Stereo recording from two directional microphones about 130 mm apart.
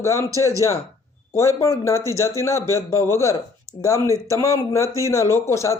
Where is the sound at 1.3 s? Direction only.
20° left (ahead or behind).